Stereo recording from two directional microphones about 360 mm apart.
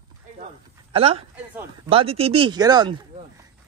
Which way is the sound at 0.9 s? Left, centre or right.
Centre.